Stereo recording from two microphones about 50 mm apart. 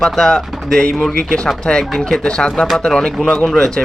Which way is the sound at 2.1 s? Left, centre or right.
Centre.